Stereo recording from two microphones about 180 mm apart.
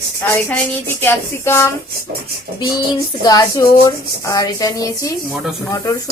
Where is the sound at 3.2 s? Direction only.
20° left (ahead or behind).